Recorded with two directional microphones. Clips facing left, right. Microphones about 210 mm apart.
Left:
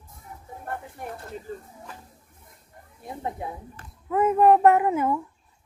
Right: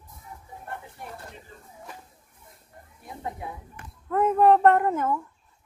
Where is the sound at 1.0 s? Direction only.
50° left (ahead or behind).